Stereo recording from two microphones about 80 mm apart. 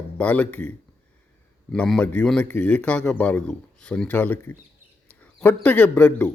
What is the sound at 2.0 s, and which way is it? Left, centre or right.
A man's voice, centre.